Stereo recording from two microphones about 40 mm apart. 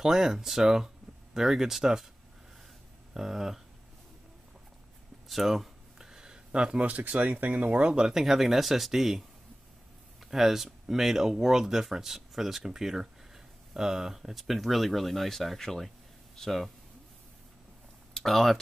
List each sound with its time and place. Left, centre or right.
0.0 s speech: centre
3.2 s speech: centre
5.3 s speech: centre
5.9 s a sound: centre
6.8 s speech: right
8.0 s speech: centre
10.2 s speech: centre
18.1 s speech: centre